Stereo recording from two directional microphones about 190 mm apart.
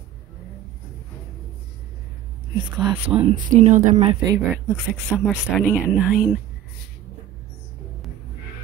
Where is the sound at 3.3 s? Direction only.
40° right (ahead or behind).